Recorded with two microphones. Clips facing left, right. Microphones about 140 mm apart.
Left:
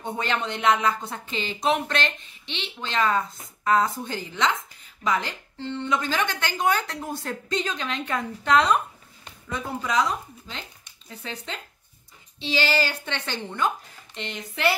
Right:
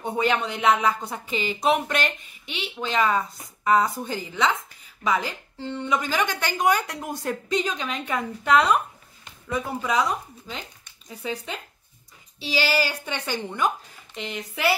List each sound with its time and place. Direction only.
0.0 s a woman's voice: 10° right (ahead or behind)